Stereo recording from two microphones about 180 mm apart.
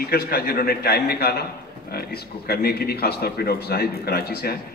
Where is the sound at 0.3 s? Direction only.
60° left (ahead or behind).